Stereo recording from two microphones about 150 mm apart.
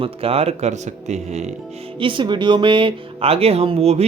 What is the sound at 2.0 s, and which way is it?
Speech, 35° right (ahead or behind).